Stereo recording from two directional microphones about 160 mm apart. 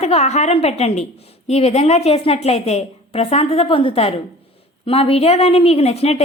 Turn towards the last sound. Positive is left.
turn(degrees=40)  # may be behind; listen again after turning